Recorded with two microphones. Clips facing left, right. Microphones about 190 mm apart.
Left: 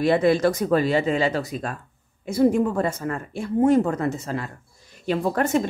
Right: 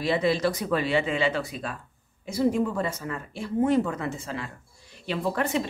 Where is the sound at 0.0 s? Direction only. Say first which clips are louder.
Left 6 dB; 50° left (ahead or behind).